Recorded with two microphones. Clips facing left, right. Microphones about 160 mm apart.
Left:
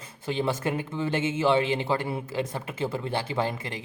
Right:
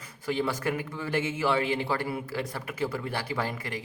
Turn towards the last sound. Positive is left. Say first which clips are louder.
# left 3 dB
turn(degrees=20)  # may be behind; listen again after turning